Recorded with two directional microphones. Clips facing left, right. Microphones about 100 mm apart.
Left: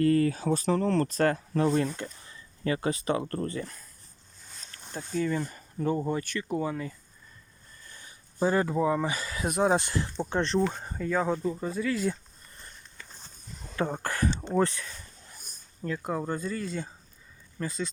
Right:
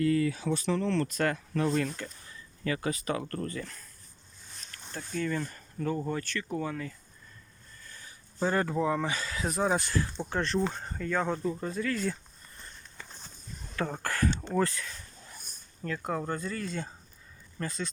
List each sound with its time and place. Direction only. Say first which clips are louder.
0.0 s speech: left 3 dB; 45° left (ahead or behind); by 3.8 s 25° left (ahead or behind)
4.9 s speech: left 3 dB; 15° left (ahead or behind)
7.9 s a sound: even; 20° left (ahead or behind)
8.4 s speech: left 3 dB; 10° left (ahead or behind)
9.7 s speech: left 2 dB; 20° left (ahead or behind)
13.7 s speech: left 2 dB; 20° left (ahead or behind)
15.8 s speech: left 2 dB; 10° left (ahead or behind)